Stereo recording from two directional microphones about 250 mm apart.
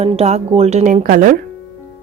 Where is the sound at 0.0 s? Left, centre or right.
Right.